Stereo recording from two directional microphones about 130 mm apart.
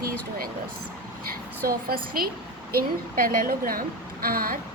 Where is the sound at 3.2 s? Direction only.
90° right.